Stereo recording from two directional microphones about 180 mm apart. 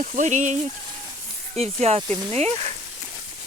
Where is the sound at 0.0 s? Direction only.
45° right (ahead or behind).